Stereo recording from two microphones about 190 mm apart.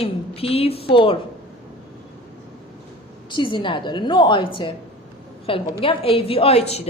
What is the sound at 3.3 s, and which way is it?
A woman's voice, 25° left (ahead or behind).